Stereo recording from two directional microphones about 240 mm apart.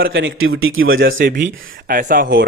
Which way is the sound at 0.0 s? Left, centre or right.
Right.